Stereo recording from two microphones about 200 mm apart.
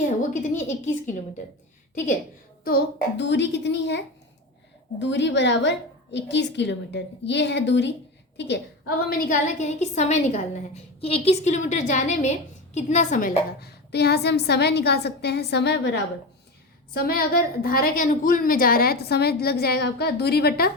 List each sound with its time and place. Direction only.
0.2 s a woman's voice: 40° left (ahead or behind)
3.2 s a woman's voice: 60° left (ahead or behind)
9.0 s a woman's voice: 45° left (ahead or behind)